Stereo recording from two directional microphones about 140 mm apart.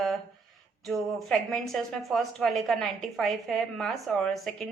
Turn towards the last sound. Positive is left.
turn(degrees=0)  # may be behind; listen again after turning